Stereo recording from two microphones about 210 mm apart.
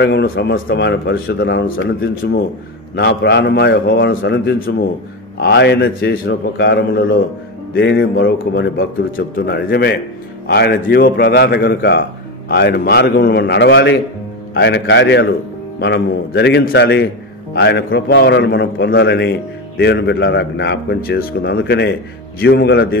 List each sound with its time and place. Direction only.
0.0 s a man's voice: 55° left (ahead or behind)